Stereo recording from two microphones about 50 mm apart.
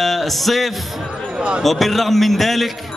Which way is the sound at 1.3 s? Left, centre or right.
Right.